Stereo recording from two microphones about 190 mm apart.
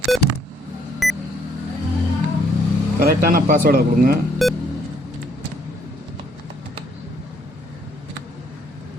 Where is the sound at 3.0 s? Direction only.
50° right (ahead or behind).